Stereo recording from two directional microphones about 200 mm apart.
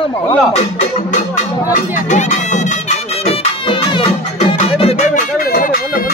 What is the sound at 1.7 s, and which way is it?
Music, 40° left (ahead or behind).